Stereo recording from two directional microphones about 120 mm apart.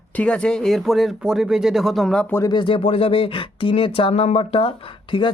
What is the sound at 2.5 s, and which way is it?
Speech, 40° left (ahead or behind).